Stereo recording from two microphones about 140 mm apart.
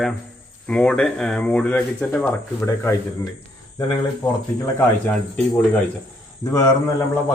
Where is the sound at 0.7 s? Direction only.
5° left (ahead or behind).